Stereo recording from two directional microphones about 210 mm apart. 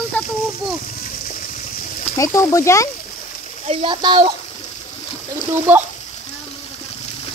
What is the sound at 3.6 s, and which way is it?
Speech, 20° right (ahead or behind).